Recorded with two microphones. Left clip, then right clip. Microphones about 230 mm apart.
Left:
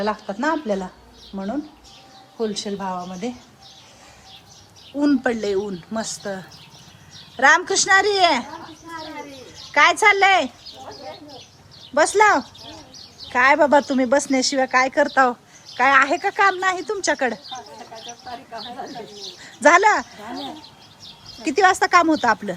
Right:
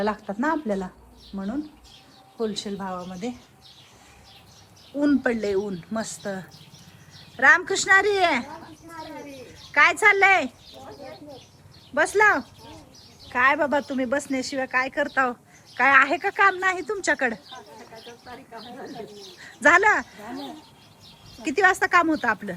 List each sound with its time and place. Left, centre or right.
0.0 s speech: centre
4.9 s speech: centre
9.7 s speech: centre
11.9 s speech: centre
21.4 s speech: centre